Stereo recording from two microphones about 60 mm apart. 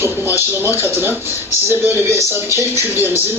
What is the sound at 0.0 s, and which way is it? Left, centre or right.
Speech, right.